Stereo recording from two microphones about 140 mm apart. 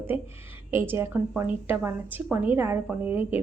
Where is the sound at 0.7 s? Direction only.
20° right (ahead or behind).